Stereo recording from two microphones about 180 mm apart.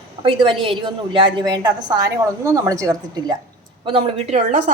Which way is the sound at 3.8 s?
35° right (ahead or behind).